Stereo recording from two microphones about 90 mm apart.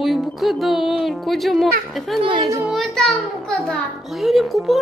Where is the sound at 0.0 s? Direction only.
Centre (ahead or behind).